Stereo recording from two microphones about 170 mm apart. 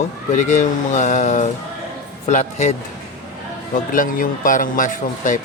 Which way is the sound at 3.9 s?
55° left (ahead or behind).